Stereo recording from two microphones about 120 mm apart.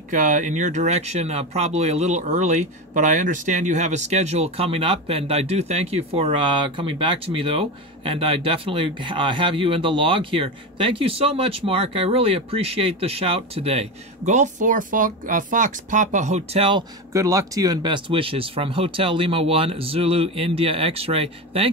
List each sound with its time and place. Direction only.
0.1 s speech: 90° right; by 16.6 s 70° right (ahead or behind)
17.1 s speech: 25° right (ahead or behind); by 21.6 s 55° right (ahead or behind)